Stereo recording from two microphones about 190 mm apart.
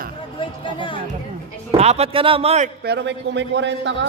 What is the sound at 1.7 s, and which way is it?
Speech, 35° right (ahead or behind).